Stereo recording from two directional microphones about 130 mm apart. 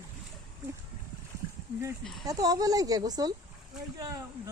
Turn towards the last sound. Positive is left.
turn(degrees=-30)  # may be behind; listen again after turning